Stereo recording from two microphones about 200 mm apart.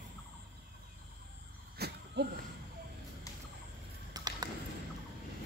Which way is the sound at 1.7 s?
55° right (ahead or behind).